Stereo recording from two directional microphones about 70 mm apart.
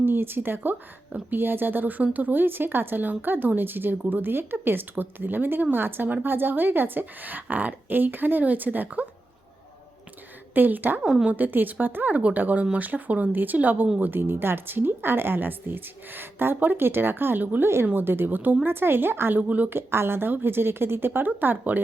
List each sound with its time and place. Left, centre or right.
0.0 s speech: right
10.5 s speech: right
11.0 s a woman's voice: centre
11.3 s a woman's voice: right
19.7 s a woman's voice: right